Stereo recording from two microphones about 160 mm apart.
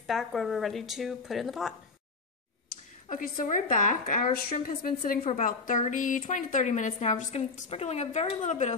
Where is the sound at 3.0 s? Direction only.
60° left (ahead or behind).